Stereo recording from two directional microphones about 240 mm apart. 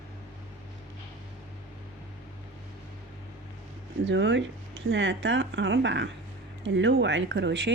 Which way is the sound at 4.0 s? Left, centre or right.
Right.